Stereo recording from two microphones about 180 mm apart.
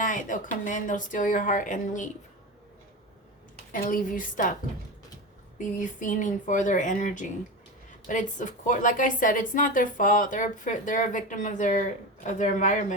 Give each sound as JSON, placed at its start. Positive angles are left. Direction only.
{"t": 0.0, "sound": "a sound", "side_deg": 45}
{"t": 0.6, "sound": "a woman's voice", "side_deg": 45}
{"t": 3.7, "sound": "a woman's voice", "side_deg": 50}
{"t": 5.5, "sound": "a woman's voice", "side_deg": 45}